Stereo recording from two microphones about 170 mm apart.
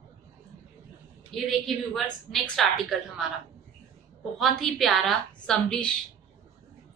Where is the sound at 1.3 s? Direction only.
Centre (ahead or behind).